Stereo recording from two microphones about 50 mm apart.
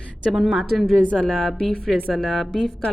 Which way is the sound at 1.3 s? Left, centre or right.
Centre.